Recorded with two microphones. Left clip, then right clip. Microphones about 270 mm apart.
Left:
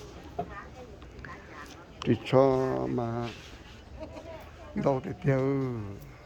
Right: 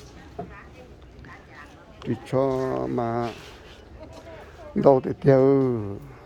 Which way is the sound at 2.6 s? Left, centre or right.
Centre.